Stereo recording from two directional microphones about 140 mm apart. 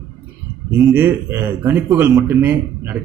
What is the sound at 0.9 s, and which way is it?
Speech, 15° right (ahead or behind).